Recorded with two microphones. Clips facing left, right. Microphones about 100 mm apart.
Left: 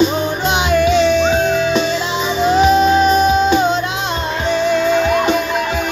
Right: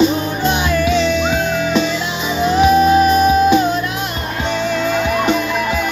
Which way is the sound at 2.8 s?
25° left (ahead or behind).